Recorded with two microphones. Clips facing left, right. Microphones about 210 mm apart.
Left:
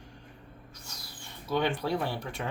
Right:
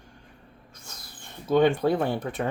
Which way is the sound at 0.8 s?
50° right (ahead or behind).